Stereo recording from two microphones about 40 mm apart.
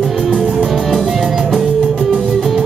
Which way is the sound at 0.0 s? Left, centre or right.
Centre.